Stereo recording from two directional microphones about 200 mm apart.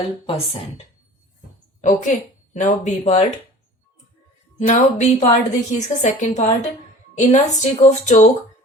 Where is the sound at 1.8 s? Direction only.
40° left (ahead or behind).